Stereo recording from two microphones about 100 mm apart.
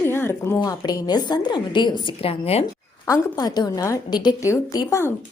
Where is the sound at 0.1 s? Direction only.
25° left (ahead or behind).